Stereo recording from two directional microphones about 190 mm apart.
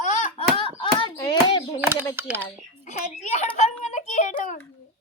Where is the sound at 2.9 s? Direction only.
35° left (ahead or behind).